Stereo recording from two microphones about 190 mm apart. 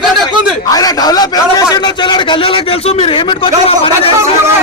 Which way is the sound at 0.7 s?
20° left (ahead or behind).